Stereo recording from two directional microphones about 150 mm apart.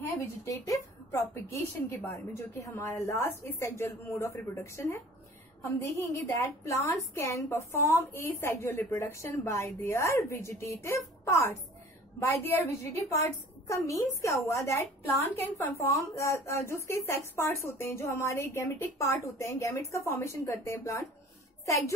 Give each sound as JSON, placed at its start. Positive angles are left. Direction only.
{"t": 0.0, "sound": "a woman's voice", "side_deg": 20}